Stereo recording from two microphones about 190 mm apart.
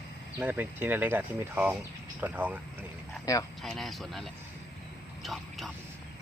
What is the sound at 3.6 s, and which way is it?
Speech, centre (ahead or behind).